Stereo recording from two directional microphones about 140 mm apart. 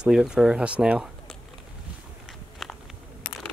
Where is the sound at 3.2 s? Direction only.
35° left (ahead or behind).